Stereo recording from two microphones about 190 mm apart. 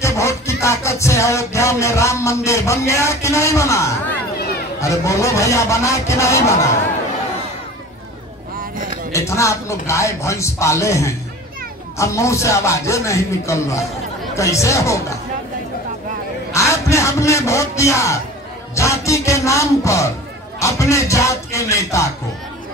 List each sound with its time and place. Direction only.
0.0 s music: 15° left (ahead or behind)
9.1 s music: 15° left (ahead or behind)
16.5 s a man's voice: 15° left (ahead or behind)
18.8 s music: 15° left (ahead or behind)